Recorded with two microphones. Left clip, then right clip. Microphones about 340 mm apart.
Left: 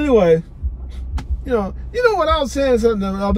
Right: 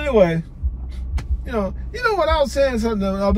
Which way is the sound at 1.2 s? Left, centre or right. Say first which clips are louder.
Left 4 dB; centre.